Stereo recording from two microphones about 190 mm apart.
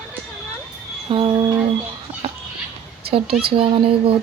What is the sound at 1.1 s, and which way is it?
Speech, 30° right (ahead or behind).